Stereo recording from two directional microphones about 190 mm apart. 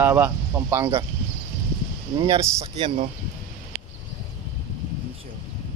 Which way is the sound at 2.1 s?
20° right (ahead or behind).